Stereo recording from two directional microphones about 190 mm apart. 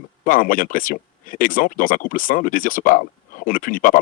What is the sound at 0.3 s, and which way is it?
Speech, 45° left (ahead or behind).